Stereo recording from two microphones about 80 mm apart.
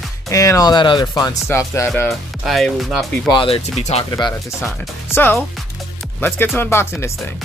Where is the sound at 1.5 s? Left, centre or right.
Left.